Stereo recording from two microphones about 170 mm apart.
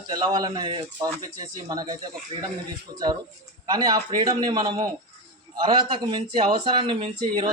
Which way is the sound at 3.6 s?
25° right (ahead or behind).